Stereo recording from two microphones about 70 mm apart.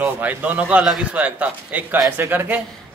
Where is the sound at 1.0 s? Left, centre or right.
Centre.